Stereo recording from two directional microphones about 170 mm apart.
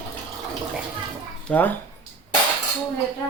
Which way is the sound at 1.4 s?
10° left (ahead or behind).